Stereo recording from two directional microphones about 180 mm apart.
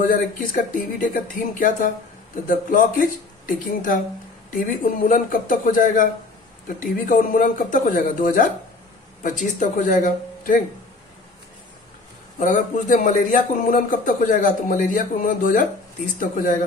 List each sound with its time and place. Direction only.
0.1 s speech: 50° left (ahead or behind)
12.4 s speech: 45° left (ahead or behind)